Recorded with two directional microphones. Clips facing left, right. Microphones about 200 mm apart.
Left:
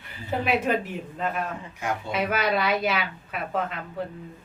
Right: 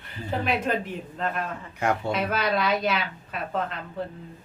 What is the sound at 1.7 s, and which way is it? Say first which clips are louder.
Speech: right 6 dB; 60° right (ahead or behind).